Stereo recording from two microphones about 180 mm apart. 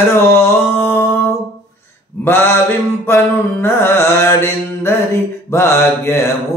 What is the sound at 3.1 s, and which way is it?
Mantra, 15° left (ahead or behind).